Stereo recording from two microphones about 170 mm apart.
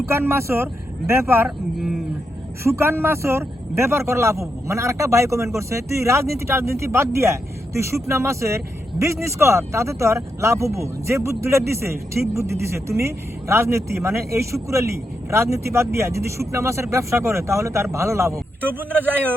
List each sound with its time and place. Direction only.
0.1 s speech: 15° right (ahead or behind)
1.5 s speech: centre (ahead or behind)
2.7 s speech: 15° right (ahead or behind)